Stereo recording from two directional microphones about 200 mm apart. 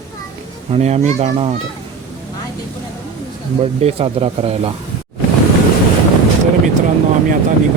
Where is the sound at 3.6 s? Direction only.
30° right (ahead or behind).